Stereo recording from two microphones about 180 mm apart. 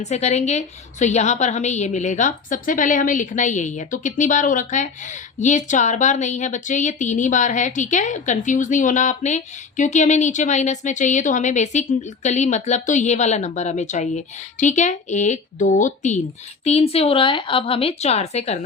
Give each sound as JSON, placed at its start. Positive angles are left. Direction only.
{"t": 0.0, "sound": "a woman's voice", "side_deg": 40}